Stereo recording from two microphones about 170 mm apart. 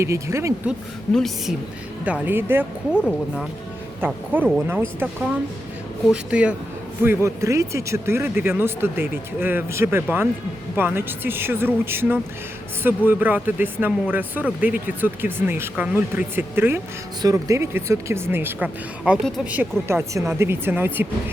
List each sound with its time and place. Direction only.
0.0 s speech: 15° right (ahead or behind)
1.1 s a woman's voice: centre (ahead or behind)
2.0 s speech: 10° right (ahead or behind)